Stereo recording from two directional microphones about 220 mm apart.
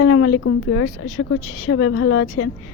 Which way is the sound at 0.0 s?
75° left (ahead or behind).